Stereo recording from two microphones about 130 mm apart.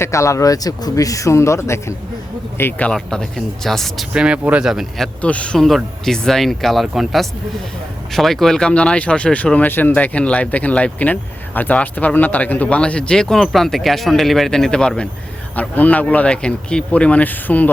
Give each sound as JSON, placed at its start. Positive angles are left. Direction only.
{"t": 0.0, "sound": "speech", "side_deg": 25}
{"t": 5.2, "sound": "speech", "side_deg": 10}